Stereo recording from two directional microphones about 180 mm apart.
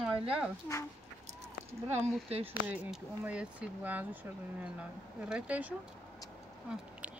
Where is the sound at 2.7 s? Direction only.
5° right (ahead or behind).